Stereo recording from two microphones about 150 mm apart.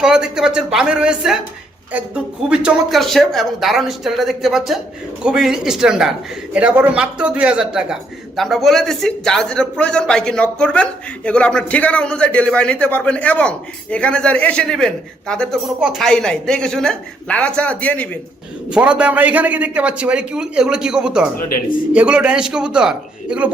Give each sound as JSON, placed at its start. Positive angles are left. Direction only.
{"t": 0.0, "sound": "a man's voice", "side_deg": -5}
{"t": 18.7, "sound": "a man's voice", "side_deg": -5}
{"t": 21.3, "sound": "speech", "side_deg": 75}
{"t": 21.9, "sound": "a man's voice", "side_deg": -5}